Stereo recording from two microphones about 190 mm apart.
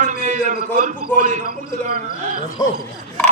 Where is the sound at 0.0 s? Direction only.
45° right (ahead or behind).